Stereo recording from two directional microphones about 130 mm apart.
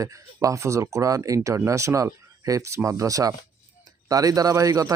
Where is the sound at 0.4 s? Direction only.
25° right (ahead or behind).